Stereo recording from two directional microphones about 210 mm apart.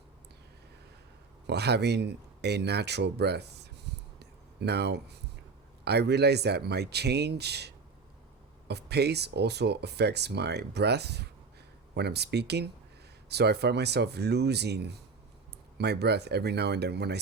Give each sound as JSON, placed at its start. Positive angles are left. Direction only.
{"t": 1.5, "sound": "speech", "side_deg": -50}
{"t": 4.2, "sound": "a sound", "side_deg": -50}
{"t": 5.8, "sound": "speech", "side_deg": -50}